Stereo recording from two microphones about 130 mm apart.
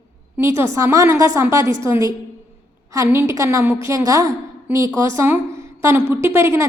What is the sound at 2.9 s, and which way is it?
A woman's voice, 25° right (ahead or behind).